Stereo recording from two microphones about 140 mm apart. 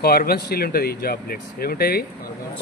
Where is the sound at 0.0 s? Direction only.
90° left.